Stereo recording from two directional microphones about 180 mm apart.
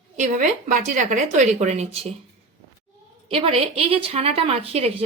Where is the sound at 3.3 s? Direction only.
30° right (ahead or behind).